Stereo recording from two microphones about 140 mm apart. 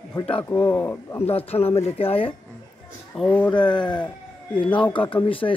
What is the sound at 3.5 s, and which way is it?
A man's voice, 35° left (ahead or behind).